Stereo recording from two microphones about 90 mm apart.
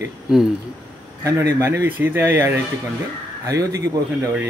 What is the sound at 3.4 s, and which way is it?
Speech, 40° right (ahead or behind).